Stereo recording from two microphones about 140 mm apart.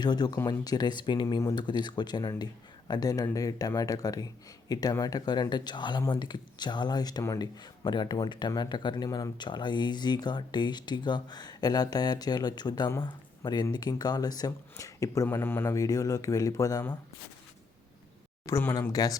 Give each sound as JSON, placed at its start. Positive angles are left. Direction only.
{"t": 0.0, "sound": "speech", "side_deg": 30}
{"t": 18.4, "sound": "speech", "side_deg": 20}